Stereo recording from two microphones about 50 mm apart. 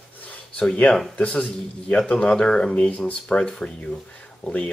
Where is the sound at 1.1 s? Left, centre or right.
Left.